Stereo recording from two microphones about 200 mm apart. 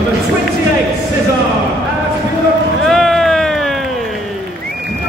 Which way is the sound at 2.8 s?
Centre (ahead or behind).